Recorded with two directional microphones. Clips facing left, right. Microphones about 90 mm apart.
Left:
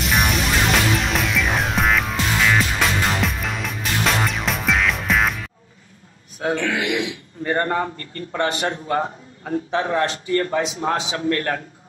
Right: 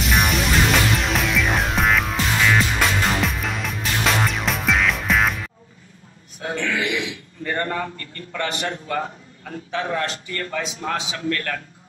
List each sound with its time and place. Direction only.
0.0 s music: centre (ahead or behind)
6.5 s a man's voice: 60° left (ahead or behind)
7.4 s a man's voice: 30° left (ahead or behind)